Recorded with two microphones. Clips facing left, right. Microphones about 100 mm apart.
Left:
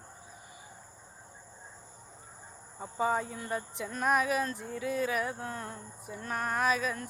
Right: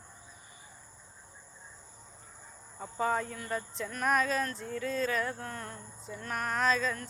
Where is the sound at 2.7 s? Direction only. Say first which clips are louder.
Left 1 dB; 10° left (ahead or behind).